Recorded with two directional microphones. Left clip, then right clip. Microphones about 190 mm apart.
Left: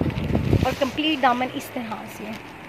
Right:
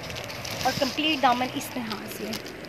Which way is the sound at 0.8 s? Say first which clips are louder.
Left 2 dB; 40° left (ahead or behind).